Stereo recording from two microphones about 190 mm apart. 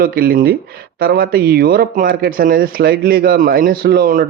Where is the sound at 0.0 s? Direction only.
50° right (ahead or behind).